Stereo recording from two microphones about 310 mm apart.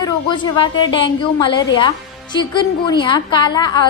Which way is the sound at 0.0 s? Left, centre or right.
Centre.